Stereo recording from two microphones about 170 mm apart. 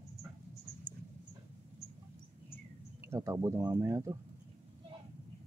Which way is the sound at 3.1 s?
20° right (ahead or behind).